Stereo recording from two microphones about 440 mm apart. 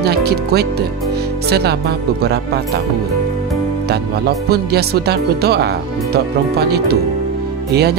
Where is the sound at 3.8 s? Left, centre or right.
Right.